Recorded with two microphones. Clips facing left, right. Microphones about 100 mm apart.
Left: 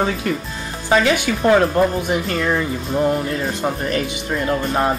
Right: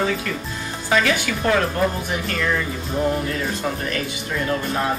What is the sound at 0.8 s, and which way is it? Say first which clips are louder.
Speech: left 4 dB; 20° left (ahead or behind).